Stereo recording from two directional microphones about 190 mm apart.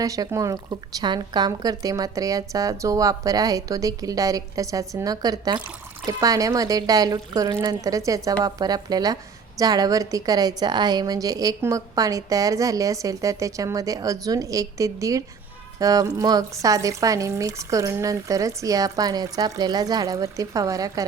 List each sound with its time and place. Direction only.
0.0 s a woman's voice: 20° right (ahead or behind)